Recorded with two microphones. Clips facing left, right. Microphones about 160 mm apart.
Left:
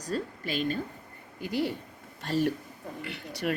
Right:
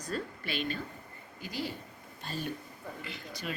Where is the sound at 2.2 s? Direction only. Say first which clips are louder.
Left 11 dB; 75° left (ahead or behind).